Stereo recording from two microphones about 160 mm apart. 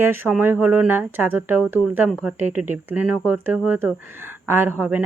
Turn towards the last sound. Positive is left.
turn(degrees=-10)  # may be behind; listen again after turning